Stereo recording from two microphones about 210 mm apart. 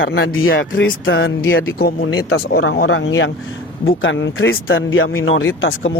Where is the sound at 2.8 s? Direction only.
75° left (ahead or behind); by 4.7 s 50° left (ahead or behind).